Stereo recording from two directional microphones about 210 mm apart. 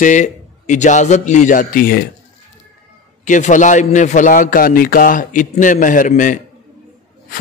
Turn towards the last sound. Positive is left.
turn(degrees=40)  # may be behind; listen again after turning